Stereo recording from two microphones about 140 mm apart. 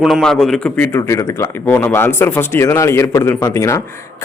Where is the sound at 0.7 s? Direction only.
15° left (ahead or behind).